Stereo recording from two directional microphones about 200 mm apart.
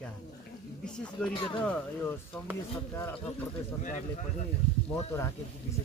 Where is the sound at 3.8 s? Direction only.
40° left (ahead or behind).